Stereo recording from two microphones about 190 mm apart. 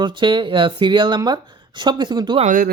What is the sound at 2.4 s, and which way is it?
Speech, 45° right (ahead or behind).